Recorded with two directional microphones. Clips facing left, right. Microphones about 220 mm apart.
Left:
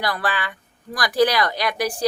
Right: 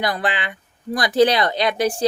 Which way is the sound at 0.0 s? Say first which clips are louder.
Right 2 dB; 20° right (ahead or behind).